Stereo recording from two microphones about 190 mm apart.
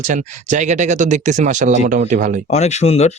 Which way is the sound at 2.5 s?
35° left (ahead or behind).